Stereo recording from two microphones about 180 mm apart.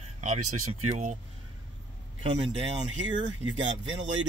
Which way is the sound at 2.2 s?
30° right (ahead or behind).